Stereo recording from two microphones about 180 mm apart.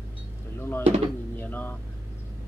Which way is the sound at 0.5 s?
15° left (ahead or behind).